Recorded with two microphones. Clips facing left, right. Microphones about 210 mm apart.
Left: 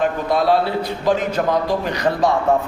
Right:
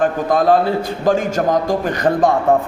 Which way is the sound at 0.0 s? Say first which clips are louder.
Right 3 dB; 45° right (ahead or behind).